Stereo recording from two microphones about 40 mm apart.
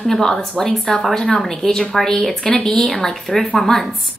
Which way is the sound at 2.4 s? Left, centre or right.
Left.